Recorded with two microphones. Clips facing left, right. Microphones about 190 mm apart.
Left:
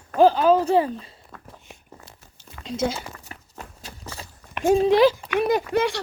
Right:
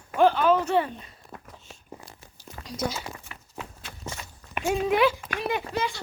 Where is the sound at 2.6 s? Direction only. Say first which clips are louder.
Left 6 dB; 25° left (ahead or behind).